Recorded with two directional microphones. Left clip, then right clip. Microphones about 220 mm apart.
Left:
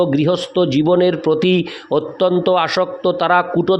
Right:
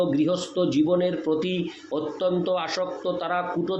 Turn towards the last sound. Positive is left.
turn(degrees=50)  # may be behind; listen again after turning